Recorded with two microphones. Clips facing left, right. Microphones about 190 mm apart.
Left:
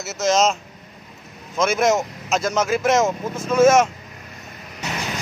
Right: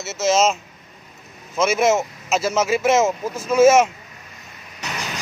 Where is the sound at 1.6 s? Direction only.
5° right (ahead or behind).